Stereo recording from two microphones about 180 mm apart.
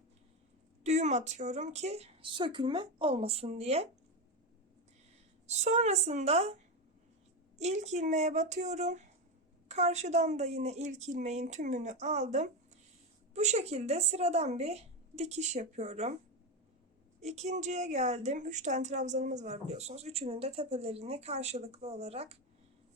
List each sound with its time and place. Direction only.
0.9 s speech: 40° right (ahead or behind)
5.5 s speech: 40° right (ahead or behind)
7.6 s speech: 40° right (ahead or behind)
17.2 s speech: 40° right (ahead or behind)